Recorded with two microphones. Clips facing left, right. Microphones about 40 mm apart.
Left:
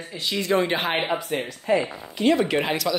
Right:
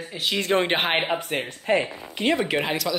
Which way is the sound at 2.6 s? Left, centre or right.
Centre.